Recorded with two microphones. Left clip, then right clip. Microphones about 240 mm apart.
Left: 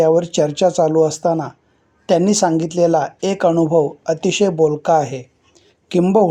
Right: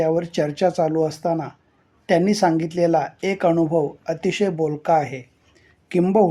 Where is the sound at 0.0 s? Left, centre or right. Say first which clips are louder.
Left 7 dB; centre.